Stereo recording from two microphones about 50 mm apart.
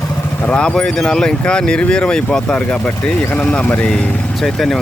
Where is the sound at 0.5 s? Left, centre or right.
Centre.